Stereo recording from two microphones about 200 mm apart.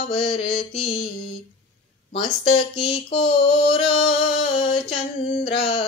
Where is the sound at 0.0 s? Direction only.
30° left (ahead or behind).